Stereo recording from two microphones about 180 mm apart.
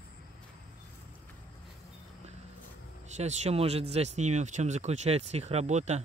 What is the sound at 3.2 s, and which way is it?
Speech, 35° right (ahead or behind).